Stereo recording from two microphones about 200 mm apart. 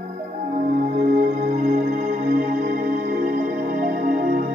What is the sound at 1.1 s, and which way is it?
Music, 40° right (ahead or behind).